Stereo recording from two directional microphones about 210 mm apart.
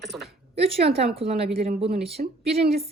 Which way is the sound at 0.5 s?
30° right (ahead or behind).